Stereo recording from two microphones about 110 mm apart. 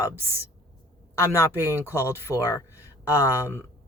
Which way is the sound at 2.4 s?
30° left (ahead or behind).